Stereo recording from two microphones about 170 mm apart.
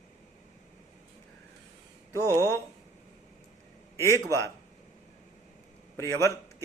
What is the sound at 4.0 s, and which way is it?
Speech, 20° left (ahead or behind).